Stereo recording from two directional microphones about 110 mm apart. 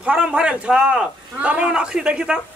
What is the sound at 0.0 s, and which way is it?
Speech, 10° right (ahead or behind).